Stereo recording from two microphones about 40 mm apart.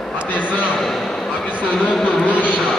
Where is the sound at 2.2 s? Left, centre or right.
Left.